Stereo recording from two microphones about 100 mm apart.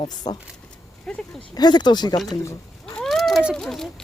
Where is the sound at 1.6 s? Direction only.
45° left (ahead or behind).